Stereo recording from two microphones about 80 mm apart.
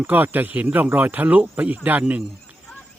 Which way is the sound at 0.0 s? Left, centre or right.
Right.